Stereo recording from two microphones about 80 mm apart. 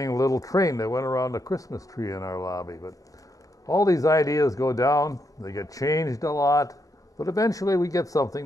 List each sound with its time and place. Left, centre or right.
0.0 s speech: left